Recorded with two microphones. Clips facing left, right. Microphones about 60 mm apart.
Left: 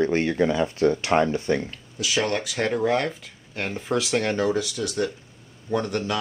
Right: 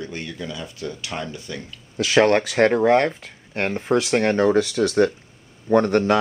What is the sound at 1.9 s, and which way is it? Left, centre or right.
Speech, right.